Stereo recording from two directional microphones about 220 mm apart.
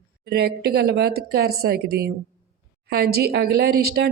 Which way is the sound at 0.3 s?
45° right (ahead or behind).